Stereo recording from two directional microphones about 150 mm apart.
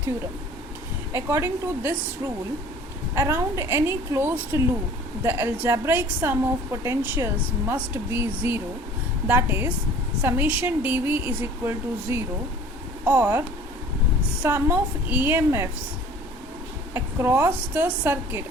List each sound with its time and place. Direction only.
1.1 s speech: 15° right (ahead or behind)
14.4 s speech: 10° right (ahead or behind)
16.9 s speech: 15° right (ahead or behind)